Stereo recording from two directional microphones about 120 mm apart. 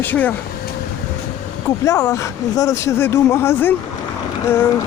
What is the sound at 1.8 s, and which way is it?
Speech, 25° left (ahead or behind).